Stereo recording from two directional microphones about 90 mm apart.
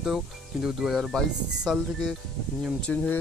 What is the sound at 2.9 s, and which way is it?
Speech, 15° left (ahead or behind).